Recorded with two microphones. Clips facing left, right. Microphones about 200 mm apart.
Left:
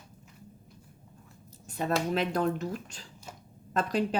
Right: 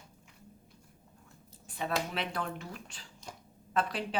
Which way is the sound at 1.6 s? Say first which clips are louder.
Left 5 dB; 45° left (ahead or behind).